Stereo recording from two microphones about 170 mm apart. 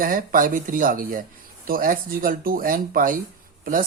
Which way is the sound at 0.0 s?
55° right (ahead or behind).